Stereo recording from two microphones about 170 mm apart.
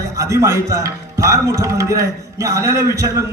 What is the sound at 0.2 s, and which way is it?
A man's voice, 15° right (ahead or behind).